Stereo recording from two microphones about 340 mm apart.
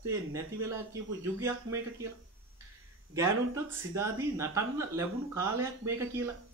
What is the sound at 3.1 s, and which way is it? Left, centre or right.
Speech, centre.